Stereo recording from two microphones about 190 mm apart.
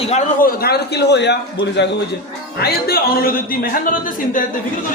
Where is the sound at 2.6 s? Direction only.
55° left (ahead or behind).